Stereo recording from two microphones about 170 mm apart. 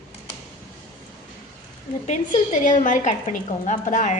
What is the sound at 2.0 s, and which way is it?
A woman's voice, 45° left (ahead or behind).